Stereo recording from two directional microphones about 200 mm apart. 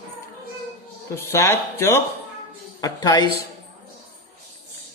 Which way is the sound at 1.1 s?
15° left (ahead or behind).